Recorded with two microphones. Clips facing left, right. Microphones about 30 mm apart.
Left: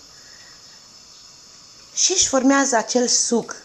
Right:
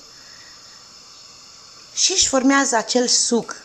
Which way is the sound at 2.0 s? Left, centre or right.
Right.